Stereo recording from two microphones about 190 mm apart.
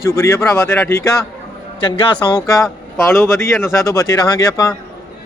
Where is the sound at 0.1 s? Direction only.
15° left (ahead or behind).